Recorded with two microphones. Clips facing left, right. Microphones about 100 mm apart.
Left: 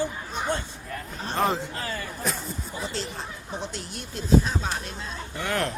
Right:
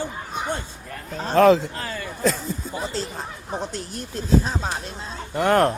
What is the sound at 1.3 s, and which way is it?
Speech, 90° right.